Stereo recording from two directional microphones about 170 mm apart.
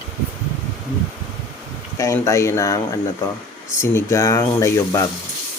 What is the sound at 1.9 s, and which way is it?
Speech, 15° left (ahead or behind).